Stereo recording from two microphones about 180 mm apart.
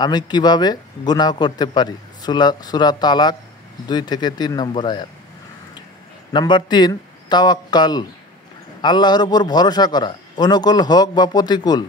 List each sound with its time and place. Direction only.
0.0 s a man's voice: 25° left (ahead or behind)
6.3 s a man's voice: 25° left (ahead or behind)